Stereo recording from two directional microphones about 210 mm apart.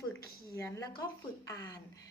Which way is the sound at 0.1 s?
15° left (ahead or behind).